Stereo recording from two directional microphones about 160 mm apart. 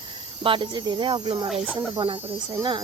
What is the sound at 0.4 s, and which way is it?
Speech, 30° right (ahead or behind).